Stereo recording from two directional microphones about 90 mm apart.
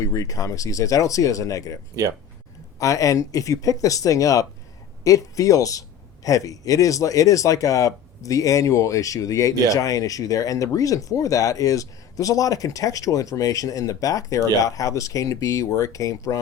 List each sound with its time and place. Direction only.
0.0 s speech: 40° left (ahead or behind)